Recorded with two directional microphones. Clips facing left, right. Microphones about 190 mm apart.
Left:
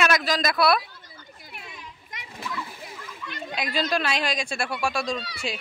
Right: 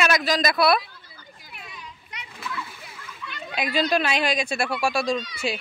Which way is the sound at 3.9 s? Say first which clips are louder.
Right 3 dB; 5° right (ahead or behind).